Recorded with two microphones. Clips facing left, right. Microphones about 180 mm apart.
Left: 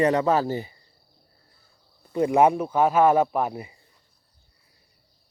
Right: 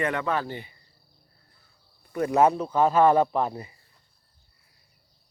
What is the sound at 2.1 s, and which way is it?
Speech, 20° left (ahead or behind).